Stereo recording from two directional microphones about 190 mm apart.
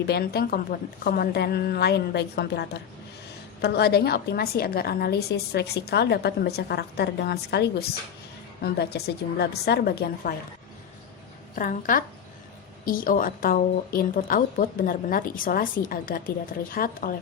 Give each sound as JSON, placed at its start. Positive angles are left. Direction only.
{"t": 0.1, "sound": "a woman's voice", "side_deg": 55}
{"t": 11.5, "sound": "speech", "side_deg": 45}